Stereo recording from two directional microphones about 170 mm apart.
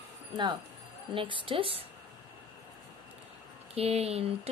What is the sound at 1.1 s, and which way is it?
Speech, 30° right (ahead or behind).